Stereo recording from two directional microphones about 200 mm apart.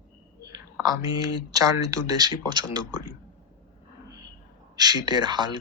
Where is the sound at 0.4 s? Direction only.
15° right (ahead or behind).